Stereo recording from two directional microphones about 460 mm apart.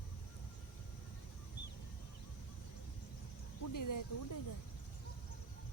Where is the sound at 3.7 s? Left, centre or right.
Left.